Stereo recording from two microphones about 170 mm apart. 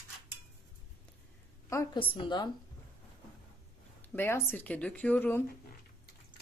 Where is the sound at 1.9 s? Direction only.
30° left (ahead or behind).